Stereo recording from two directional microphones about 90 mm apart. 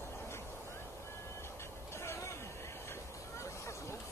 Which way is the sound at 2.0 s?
30° left (ahead or behind).